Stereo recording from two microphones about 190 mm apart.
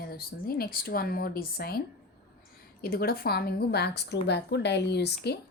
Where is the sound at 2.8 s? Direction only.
55° left (ahead or behind).